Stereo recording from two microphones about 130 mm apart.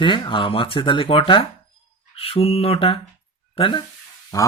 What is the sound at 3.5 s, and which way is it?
Speech, 40° left (ahead or behind).